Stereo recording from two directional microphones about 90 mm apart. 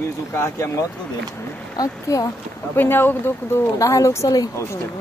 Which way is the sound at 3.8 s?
35° left (ahead or behind).